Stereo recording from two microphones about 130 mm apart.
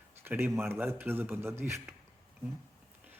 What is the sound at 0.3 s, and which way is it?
Speech, 15° right (ahead or behind).